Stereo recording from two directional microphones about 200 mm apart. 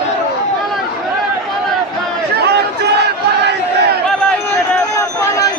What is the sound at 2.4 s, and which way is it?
Crowd, 55° right (ahead or behind).